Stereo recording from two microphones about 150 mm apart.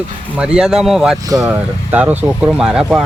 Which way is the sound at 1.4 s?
10° right (ahead or behind).